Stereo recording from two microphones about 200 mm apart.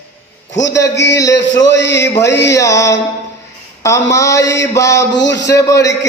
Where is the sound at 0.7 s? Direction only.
15° left (ahead or behind).